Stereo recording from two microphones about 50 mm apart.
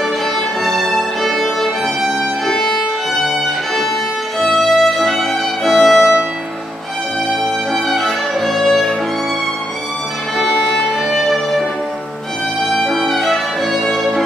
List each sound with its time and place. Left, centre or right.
0.7 s music: centre
2.4 s violin: centre
4.4 s violin: centre
7.9 s violin: centre
10.3 s violin: centre
11.1 s music: centre
12.7 s violin: centre